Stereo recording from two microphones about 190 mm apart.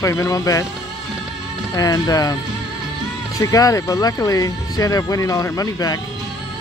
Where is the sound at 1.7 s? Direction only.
20° left (ahead or behind).